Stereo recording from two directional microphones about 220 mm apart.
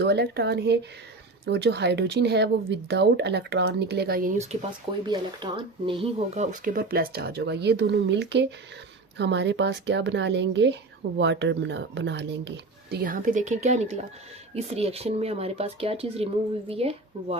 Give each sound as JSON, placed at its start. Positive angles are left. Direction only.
{"t": 0.0, "sound": "speech", "side_deg": -50}
{"t": 5.0, "sound": "speech", "side_deg": -20}